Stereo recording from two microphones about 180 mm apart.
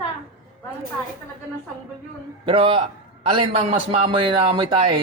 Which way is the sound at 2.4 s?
30° right (ahead or behind).